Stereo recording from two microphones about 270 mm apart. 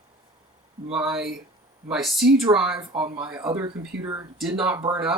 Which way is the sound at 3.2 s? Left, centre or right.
Centre.